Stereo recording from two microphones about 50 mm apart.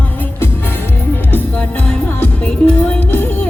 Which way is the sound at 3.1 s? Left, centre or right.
Left.